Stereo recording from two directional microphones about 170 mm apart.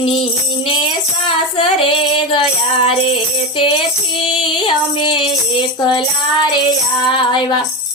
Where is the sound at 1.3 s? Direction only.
30° left (ahead or behind).